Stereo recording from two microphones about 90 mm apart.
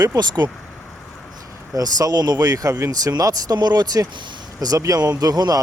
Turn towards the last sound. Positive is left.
turn(degrees=-45)  # may be behind; listen again after turning